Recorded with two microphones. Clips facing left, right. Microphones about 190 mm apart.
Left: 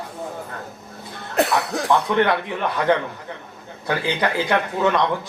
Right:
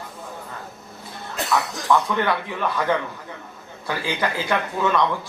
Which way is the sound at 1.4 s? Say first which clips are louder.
Left 4 dB; 60° left (ahead or behind).